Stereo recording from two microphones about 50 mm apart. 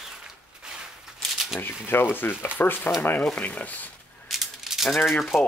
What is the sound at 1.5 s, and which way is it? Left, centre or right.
Speech, left.